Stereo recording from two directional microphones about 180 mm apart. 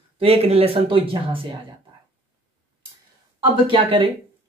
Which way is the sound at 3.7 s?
30° right (ahead or behind).